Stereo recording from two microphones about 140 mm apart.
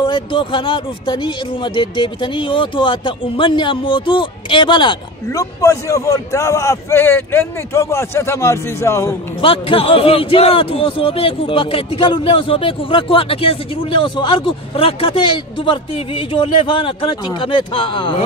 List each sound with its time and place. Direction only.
0.0 s speech: 35° left (ahead or behind); by 9.1 s 20° left (ahead or behind)
9.4 s speech: 40° left (ahead or behind)